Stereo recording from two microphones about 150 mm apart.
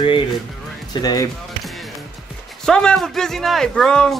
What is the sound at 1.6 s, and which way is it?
Basketball bounce, centre (ahead or behind).